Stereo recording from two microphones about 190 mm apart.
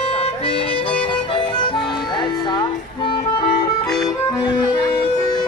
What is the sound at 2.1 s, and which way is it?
Music, 20° left (ahead or behind).